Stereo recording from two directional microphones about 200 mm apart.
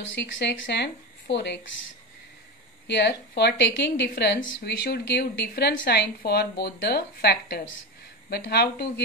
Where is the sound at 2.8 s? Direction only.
60° left (ahead or behind).